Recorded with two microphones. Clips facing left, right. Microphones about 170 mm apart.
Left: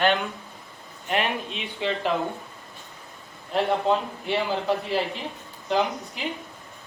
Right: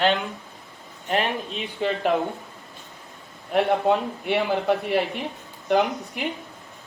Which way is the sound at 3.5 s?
60° right (ahead or behind).